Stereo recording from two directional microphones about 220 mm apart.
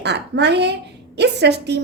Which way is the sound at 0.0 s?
50° right (ahead or behind).